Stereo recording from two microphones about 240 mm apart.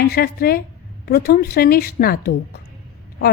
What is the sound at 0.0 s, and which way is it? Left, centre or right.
A woman's voice, left.